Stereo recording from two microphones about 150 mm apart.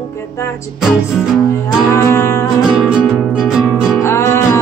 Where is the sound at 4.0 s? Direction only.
15° left (ahead or behind).